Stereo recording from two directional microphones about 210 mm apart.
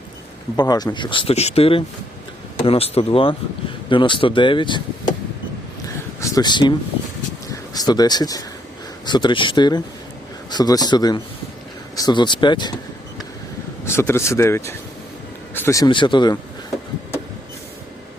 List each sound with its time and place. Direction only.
0.5 s speech: 20° left (ahead or behind)
6.1 s speech: 15° left (ahead or behind)
13.8 s speech: 10° left (ahead or behind)